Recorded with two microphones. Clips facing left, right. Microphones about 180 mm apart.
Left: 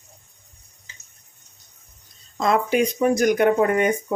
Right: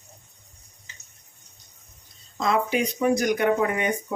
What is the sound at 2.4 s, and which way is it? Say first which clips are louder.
Speech: left 4 dB; 50° left (ahead or behind).